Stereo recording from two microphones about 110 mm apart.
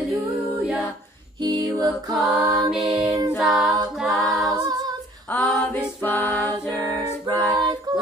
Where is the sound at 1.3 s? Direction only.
45° right (ahead or behind).